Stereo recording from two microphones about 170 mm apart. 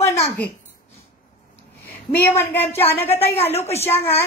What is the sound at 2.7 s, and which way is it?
Speech, 35° left (ahead or behind).